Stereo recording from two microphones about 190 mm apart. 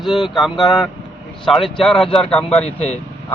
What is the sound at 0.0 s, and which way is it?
Speech, centre (ahead or behind).